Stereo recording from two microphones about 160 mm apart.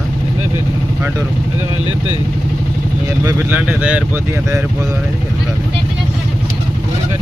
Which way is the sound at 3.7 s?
5° right (ahead or behind).